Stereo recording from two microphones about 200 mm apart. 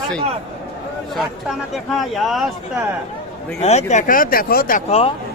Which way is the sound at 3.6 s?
35° left (ahead or behind).